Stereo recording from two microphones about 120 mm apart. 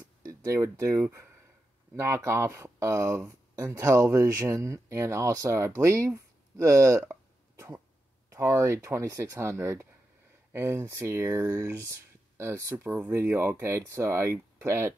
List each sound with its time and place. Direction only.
0.2 s speech: 25° right (ahead or behind)